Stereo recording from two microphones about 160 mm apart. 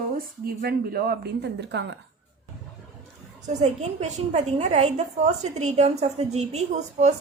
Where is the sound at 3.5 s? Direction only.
45° right (ahead or behind).